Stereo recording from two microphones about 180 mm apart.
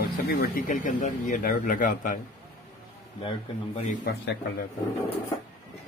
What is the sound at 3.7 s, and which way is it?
Speech, 45° left (ahead or behind).